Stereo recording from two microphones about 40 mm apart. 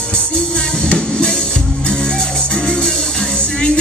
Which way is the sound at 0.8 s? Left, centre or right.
Left.